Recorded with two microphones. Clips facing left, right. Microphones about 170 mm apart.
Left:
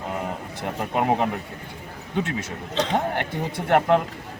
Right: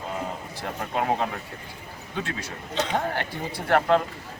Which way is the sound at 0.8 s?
15° left (ahead or behind).